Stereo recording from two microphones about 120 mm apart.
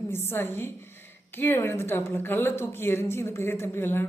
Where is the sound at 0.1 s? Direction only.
20° left (ahead or behind).